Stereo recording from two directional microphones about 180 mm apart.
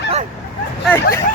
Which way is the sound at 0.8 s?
10° left (ahead or behind).